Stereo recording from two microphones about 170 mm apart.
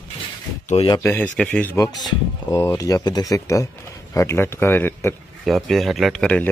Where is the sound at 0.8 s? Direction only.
35° left (ahead or behind).